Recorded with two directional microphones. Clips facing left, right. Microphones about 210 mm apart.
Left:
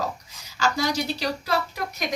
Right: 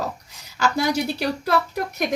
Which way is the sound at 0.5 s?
60° right (ahead or behind).